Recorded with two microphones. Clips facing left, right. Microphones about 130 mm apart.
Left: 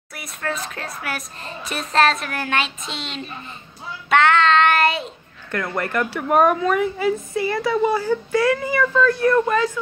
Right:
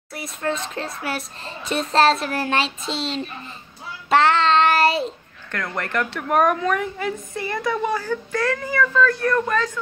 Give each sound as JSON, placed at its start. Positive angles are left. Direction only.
{"t": 0.1, "sound": "a child's voice", "side_deg": -25}
{"t": 4.1, "sound": "child singing", "side_deg": -30}
{"t": 5.5, "sound": "a woman's voice", "side_deg": 5}